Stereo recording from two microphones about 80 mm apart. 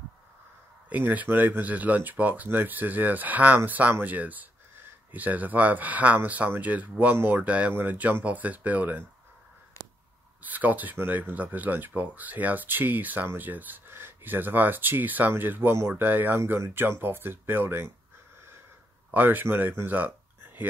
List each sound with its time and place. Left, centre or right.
0.8 s speech: centre
10.4 s speech: right
19.0 s speech: right
19.8 s a sound: right